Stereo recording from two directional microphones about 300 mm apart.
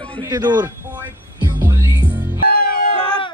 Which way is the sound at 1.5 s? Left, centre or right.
Centre.